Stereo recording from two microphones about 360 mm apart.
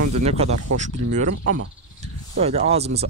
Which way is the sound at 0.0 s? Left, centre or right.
Centre.